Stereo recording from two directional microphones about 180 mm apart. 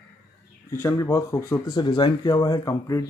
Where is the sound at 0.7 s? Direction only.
15° left (ahead or behind).